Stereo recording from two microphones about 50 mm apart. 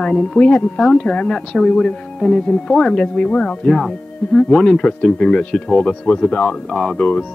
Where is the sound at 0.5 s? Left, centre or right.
Left.